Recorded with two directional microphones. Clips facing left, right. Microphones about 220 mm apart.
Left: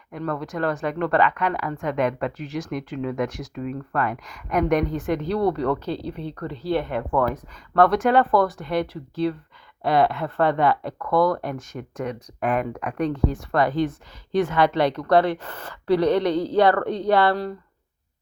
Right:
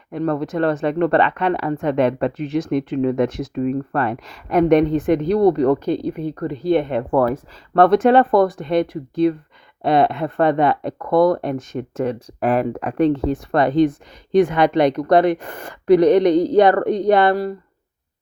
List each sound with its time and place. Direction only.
0.1 s speech: 25° right (ahead or behind)
7.1 s speech: 35° right (ahead or behind)
7.7 s a woman's voice: 25° right (ahead or behind)